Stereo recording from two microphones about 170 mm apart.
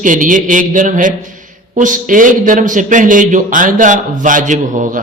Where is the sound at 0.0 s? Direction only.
50° right (ahead or behind).